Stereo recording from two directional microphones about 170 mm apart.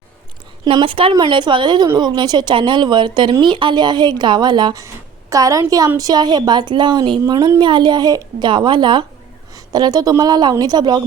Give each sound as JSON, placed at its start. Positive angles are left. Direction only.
{"t": 0.6, "sound": "speech", "side_deg": -30}